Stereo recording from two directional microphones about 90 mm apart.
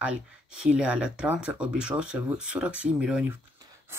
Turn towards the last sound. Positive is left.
turn(degrees=-10)  # may be behind; listen again after turning